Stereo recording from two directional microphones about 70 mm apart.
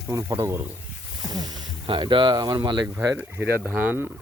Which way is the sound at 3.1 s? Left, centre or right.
Right.